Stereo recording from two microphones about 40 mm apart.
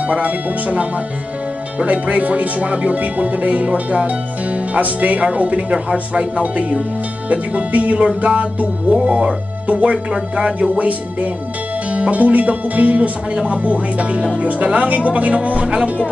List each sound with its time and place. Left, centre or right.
0.0 s speech: right
6.4 s speech: right
9.0 s speech: right
10.8 s speech: right